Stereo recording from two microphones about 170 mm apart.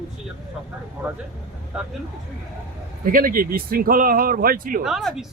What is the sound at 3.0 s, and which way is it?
Speech, 55° right (ahead or behind).